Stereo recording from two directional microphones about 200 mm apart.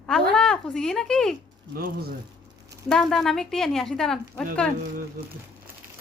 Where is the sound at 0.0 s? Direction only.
5° left (ahead or behind).